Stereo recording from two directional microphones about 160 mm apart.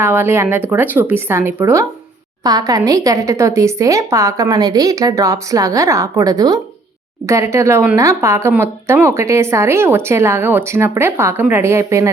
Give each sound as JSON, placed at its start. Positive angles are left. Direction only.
{"t": 0.0, "sound": "a woman's voice", "side_deg": -15}